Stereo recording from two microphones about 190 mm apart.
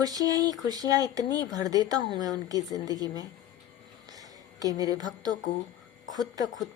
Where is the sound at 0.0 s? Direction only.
20° right (ahead or behind).